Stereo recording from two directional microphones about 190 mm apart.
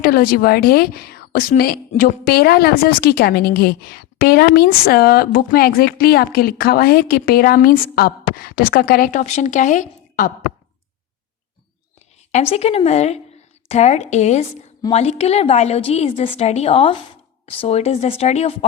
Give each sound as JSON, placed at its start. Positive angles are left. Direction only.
{"t": 0.0, "sound": "a woman's voice", "side_deg": 50}
{"t": 12.3, "sound": "a woman's voice", "side_deg": 35}